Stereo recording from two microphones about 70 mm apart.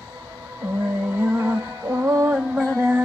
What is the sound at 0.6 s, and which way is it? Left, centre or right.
Music, right.